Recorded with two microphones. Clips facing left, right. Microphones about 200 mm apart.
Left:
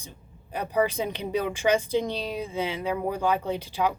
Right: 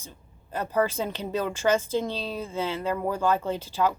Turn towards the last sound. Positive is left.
turn(degrees=15)  # may be behind; listen again after turning